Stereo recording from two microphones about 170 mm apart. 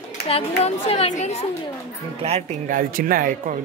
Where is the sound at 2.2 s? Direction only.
40° right (ahead or behind).